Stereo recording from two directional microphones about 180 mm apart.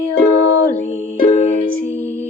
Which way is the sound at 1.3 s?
40° left (ahead or behind).